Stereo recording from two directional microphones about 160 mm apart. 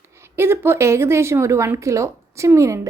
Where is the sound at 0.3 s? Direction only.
15° right (ahead or behind).